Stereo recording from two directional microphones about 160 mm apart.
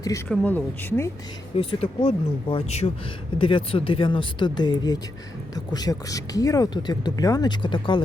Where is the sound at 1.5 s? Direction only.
40° left (ahead or behind).